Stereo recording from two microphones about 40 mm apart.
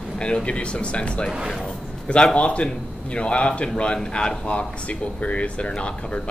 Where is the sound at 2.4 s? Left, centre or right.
Left.